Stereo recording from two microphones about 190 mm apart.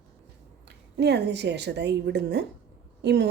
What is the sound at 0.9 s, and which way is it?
Speech, 60° right (ahead or behind).